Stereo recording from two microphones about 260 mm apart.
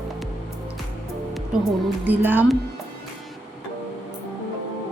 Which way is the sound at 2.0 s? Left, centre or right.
Centre.